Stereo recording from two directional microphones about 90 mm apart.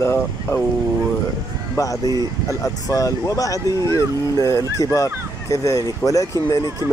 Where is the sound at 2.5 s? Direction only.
40° left (ahead or behind).